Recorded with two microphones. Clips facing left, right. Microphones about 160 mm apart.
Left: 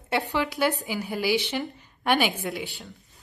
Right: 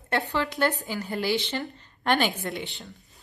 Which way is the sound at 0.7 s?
15° left (ahead or behind).